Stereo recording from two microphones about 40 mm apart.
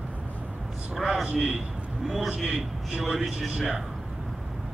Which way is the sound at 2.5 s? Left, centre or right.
Centre.